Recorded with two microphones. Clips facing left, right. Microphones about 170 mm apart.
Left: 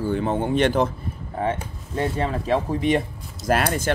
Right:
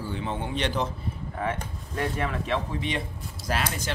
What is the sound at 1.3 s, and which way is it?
Speech, 30° left (ahead or behind).